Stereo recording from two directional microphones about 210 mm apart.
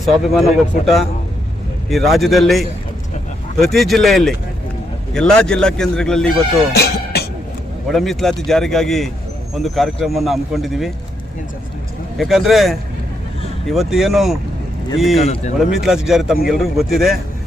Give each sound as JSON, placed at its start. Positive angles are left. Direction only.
{"t": 0.0, "sound": "speech", "side_deg": 0}
{"t": 6.7, "sound": "music", "side_deg": 50}
{"t": 7.9, "sound": "speech", "side_deg": 0}
{"t": 12.1, "sound": "speech", "side_deg": 0}
{"t": 15.2, "sound": "speech", "side_deg": 30}
{"t": 15.5, "sound": "speech", "side_deg": 0}